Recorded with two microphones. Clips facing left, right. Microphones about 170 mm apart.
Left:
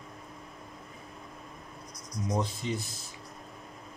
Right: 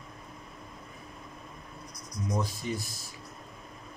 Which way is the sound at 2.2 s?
20° left (ahead or behind).